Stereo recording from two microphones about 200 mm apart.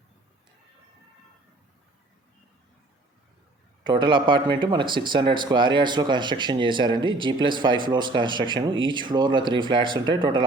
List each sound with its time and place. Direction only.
3.8 s speech: 25° right (ahead or behind)